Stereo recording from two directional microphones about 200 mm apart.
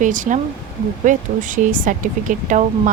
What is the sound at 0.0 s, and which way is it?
Speech, 40° right (ahead or behind).